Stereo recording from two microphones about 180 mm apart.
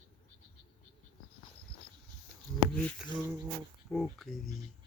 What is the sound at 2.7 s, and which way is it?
Speech, 5° left (ahead or behind).